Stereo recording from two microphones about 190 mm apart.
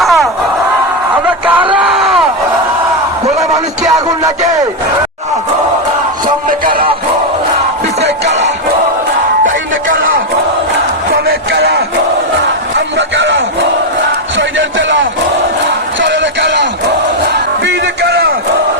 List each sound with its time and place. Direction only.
0.0 s crowd: centre (ahead or behind)
1.8 s a sound: centre (ahead or behind)
6.5 s music: 50° right (ahead or behind)
11.1 s music: 60° right (ahead or behind)
13.0 s a sound: 75° right (ahead or behind)
15.6 s crowd: 70° right (ahead or behind)
17.3 s music: 65° right (ahead or behind)